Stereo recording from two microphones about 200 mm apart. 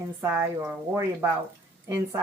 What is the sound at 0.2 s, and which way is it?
A woman's voice, 10° right (ahead or behind).